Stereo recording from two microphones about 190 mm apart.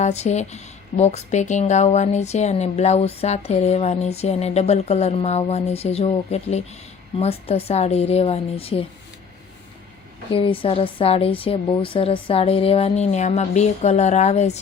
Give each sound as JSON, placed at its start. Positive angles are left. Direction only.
{"t": 0.0, "sound": "a woman's voice", "side_deg": 35}
{"t": 10.3, "sound": "a woman's voice", "side_deg": 30}